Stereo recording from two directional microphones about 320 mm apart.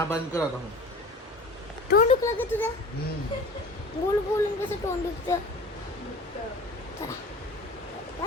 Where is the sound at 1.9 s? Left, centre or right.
Left.